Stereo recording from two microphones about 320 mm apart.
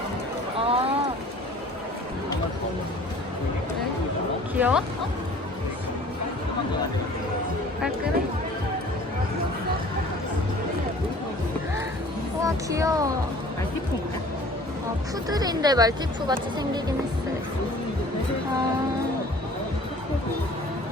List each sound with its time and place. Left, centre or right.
0.6 s boat: centre
4.5 s speech: centre
12.4 s speech: centre
15.3 s speech: centre